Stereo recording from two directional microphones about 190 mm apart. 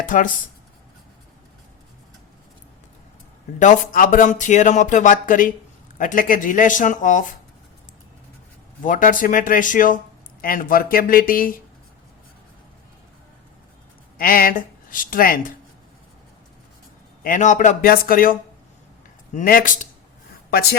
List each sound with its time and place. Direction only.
0.0 s speech: 45° left (ahead or behind)
3.6 s speech: 45° left (ahead or behind)
8.8 s speech: 45° left (ahead or behind)
14.2 s speech: 50° left (ahead or behind)
17.2 s speech: 40° left (ahead or behind)